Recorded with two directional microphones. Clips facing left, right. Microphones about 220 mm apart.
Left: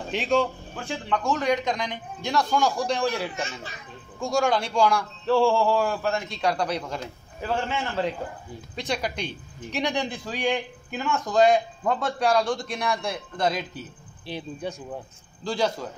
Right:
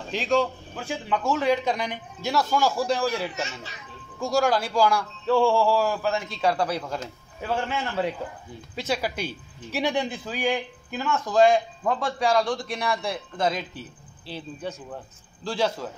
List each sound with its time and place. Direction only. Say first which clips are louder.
0.1 s a man's voice: even; centre (ahead or behind)
3.4 s a child's voice: left 1 dB; 50° left (ahead or behind)
4.2 s a man's voice: right 1 dB; centre (ahead or behind)
14.2 s speech: left 2 dB; 15° left (ahead or behind)
15.4 s a man's voice: even; centre (ahead or behind)